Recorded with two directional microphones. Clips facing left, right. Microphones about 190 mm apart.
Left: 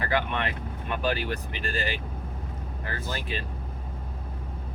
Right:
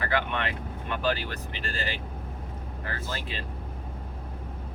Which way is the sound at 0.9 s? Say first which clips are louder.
Left 1 dB; 15° left (ahead or behind).